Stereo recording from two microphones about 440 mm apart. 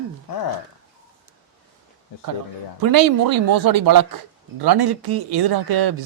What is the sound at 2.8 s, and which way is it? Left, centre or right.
A man's voice, right.